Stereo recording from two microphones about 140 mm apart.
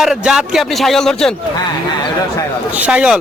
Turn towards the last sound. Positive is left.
turn(degrees=-5)  # may be behind; listen again after turning